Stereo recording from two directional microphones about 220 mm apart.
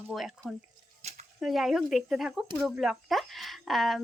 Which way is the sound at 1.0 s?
30° right (ahead or behind).